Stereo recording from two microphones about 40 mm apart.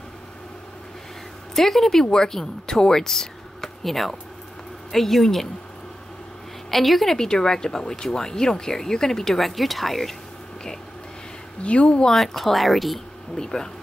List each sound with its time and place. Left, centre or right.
1.5 s speech: centre
6.7 s speech: centre
7.2 s speech: centre
11.6 s speech: left
12.1 s speech: centre
13.4 s speech: centre